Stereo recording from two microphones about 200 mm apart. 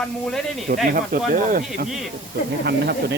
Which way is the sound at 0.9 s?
45° right (ahead or behind).